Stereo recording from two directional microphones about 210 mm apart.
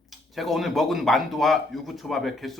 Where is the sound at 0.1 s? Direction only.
Centre (ahead or behind).